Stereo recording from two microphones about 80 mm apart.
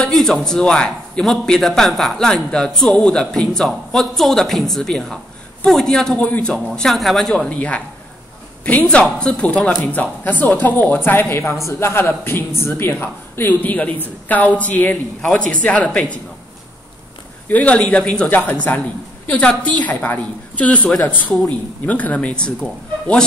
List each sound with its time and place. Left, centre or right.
0.1 s speech: centre
6.1 s speech: centre
7.4 s speech: centre
9.7 s speech: left
17.5 s speech: centre